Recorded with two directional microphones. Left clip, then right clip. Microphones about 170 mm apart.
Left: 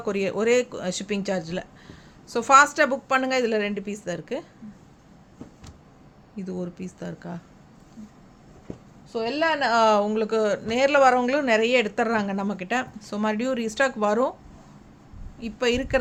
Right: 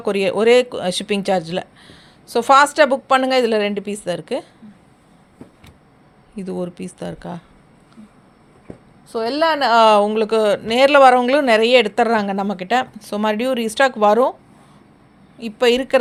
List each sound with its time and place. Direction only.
0.0 s speech: 30° right (ahead or behind)
6.3 s speech: 35° right (ahead or behind)
9.1 s speech: 40° right (ahead or behind)
15.4 s speech: 30° right (ahead or behind)